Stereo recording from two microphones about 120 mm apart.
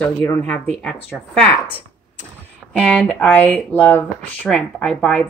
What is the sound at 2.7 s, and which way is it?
A woman's voice, 10° left (ahead or behind).